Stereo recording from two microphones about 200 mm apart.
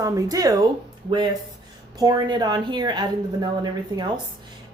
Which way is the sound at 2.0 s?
20° right (ahead or behind).